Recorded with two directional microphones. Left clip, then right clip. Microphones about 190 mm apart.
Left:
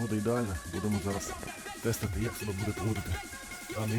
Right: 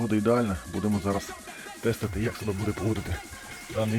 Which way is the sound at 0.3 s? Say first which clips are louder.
Right 6 dB; centre (ahead or behind).